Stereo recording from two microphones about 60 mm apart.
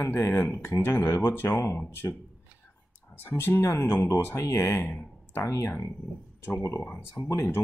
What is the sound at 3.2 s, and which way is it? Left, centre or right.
Speech, left.